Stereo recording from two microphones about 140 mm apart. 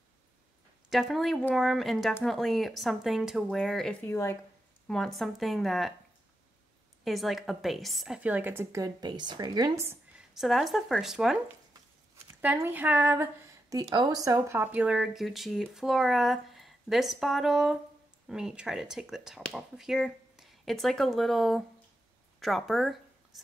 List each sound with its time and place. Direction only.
0.8 s speech: centre (ahead or behind)
4.0 s speech: 15° left (ahead or behind)
4.8 s speech: 5° left (ahead or behind)
7.1 s speech: centre (ahead or behind)
8.2 s a woman's voice: 10° right (ahead or behind); by 9.8 s 30° right (ahead or behind)
10.1 s speech: centre (ahead or behind)
12.5 s a woman's voice: 15° right (ahead or behind)
14.6 s speech: 10° right (ahead or behind)